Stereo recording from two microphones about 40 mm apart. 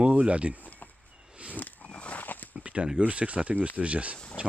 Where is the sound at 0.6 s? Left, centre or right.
Left.